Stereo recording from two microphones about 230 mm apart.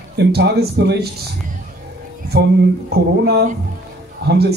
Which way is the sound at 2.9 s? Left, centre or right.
Right.